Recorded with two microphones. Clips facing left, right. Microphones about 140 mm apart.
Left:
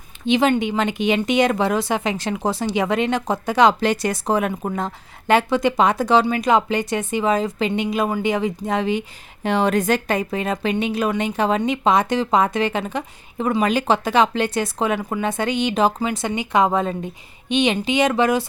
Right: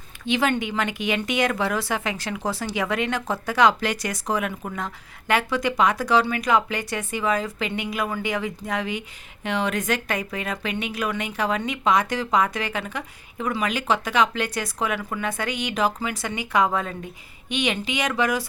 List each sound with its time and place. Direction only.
0.3 s speech: 20° left (ahead or behind)